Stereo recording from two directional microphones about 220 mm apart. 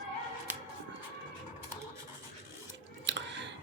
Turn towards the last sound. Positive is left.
turn(degrees=-55)  # may be behind; listen again after turning